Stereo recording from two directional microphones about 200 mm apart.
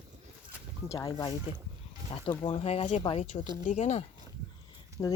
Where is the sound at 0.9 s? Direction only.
20° left (ahead or behind); by 4.0 s 35° left (ahead or behind).